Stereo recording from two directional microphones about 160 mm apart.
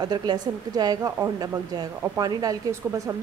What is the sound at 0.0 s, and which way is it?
A woman's voice, 25° right (ahead or behind).